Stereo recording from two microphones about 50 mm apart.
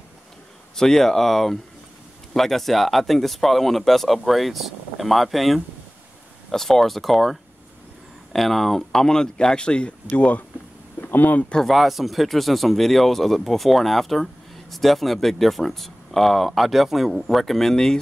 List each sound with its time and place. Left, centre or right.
0.7 s speech: centre; by 10.4 s left
11.0 s a sound: left
11.6 s speech: centre